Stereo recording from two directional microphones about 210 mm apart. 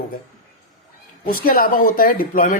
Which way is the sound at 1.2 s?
45° left (ahead or behind).